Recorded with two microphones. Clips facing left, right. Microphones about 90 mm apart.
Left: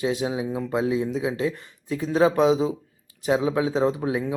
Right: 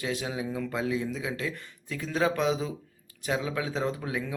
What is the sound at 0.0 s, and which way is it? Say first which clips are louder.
Speech: left 7 dB; 25° left (ahead or behind).